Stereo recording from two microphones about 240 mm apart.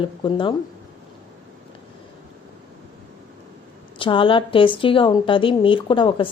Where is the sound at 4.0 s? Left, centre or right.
Left.